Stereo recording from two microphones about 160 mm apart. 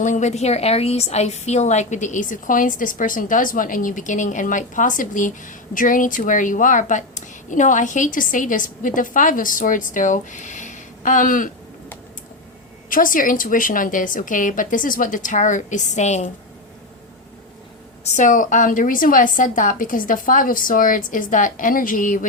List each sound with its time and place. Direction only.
0.0 s a woman's voice: 50° left (ahead or behind)
12.9 s a woman's voice: 60° left (ahead or behind)
18.0 s a woman's voice: 50° left (ahead or behind)